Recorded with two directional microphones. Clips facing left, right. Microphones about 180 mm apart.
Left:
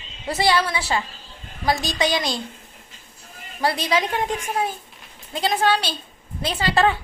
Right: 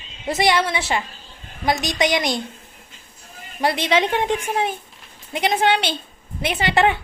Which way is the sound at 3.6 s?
25° right (ahead or behind).